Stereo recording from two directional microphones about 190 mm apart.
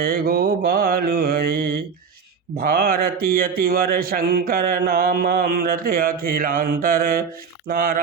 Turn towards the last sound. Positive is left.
turn(degrees=-50)  # may be behind; listen again after turning